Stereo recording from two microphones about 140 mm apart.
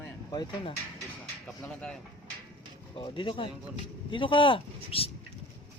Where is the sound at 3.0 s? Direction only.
40° left (ahead or behind).